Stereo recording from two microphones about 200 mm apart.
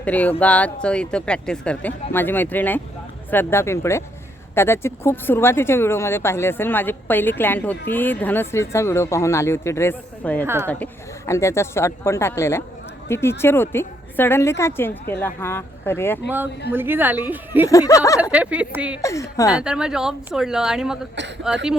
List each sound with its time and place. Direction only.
0.0 s speech: 10° left (ahead or behind)
10.4 s a woman's voice: 10° right (ahead or behind)
11.3 s speech: 15° left (ahead or behind)
16.7 s a woman's voice: 10° right (ahead or behind)
17.7 s speech: 15° left (ahead or behind)
18.2 s a woman's voice: 5° right (ahead or behind)
19.0 s speech: 15° left (ahead or behind)
19.5 s speech: 5° right (ahead or behind)